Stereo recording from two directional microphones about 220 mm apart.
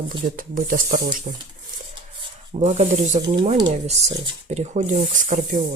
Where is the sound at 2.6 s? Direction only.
30° right (ahead or behind).